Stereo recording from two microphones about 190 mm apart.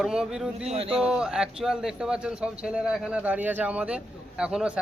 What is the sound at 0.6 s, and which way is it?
Speech, 30° right (ahead or behind).